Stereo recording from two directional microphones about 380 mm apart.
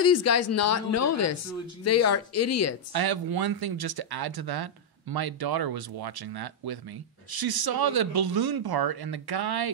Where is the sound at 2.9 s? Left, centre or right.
Right.